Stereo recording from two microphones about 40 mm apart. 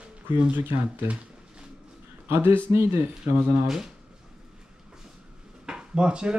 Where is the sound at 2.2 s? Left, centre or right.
Right.